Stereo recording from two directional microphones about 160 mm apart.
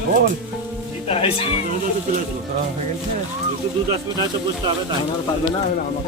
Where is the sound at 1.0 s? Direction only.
35° left (ahead or behind).